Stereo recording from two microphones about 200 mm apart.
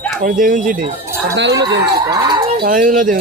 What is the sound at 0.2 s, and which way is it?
Speech, 40° right (ahead or behind).